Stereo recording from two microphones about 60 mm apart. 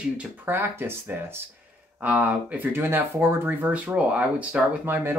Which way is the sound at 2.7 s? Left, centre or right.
Right.